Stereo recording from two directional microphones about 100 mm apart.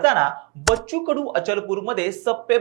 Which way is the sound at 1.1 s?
20° right (ahead or behind).